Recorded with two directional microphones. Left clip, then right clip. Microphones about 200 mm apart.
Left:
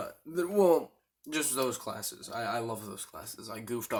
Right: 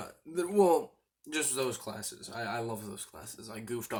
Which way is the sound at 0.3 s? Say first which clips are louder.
Left 1 dB; 35° left (ahead or behind).